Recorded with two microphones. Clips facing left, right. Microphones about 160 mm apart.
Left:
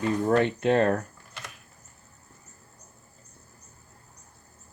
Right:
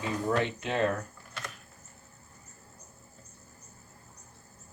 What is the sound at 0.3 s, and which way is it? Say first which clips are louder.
Speech: left 7 dB; 55° left (ahead or behind).